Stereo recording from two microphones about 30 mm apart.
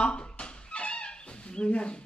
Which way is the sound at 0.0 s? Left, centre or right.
Left.